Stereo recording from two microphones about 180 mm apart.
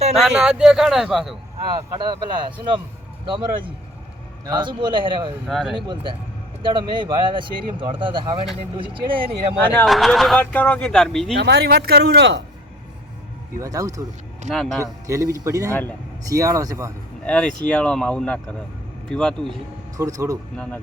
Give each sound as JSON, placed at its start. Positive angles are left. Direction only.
{"t": 0.2, "sound": "speech", "side_deg": -5}
{"t": 1.7, "sound": "speech", "side_deg": -25}
{"t": 5.5, "sound": "speech", "side_deg": 0}
{"t": 5.7, "sound": "speech", "side_deg": -25}
{"t": 9.8, "sound": "speech", "side_deg": 0}
{"t": 11.3, "sound": "speech", "side_deg": -70}
{"t": 13.6, "sound": "speech", "side_deg": -20}
{"t": 14.5, "sound": "speech", "side_deg": 0}
{"t": 15.0, "sound": "speech", "side_deg": -15}
{"t": 15.7, "sound": "speech", "side_deg": 10}
{"t": 16.3, "sound": "speech", "side_deg": -20}
{"t": 17.2, "sound": "a man's voice", "side_deg": 5}
{"t": 20.0, "sound": "speech", "side_deg": -20}
{"t": 20.6, "sound": "speech", "side_deg": 10}